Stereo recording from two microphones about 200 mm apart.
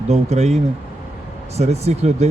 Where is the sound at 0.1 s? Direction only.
35° right (ahead or behind).